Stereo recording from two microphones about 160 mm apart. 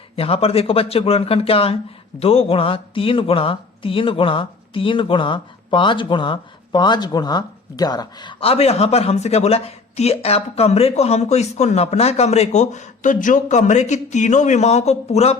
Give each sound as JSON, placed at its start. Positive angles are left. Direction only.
{"t": 0.2, "sound": "speech", "side_deg": 35}